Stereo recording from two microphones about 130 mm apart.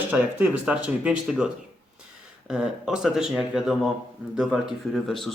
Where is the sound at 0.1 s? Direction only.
10° right (ahead or behind).